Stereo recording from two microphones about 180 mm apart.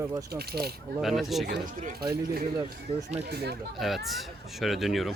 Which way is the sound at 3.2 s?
65° right (ahead or behind).